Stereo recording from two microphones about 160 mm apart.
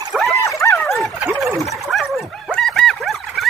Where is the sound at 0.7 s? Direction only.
Centre (ahead or behind).